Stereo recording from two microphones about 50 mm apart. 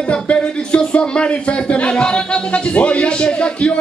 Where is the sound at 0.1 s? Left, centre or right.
Left.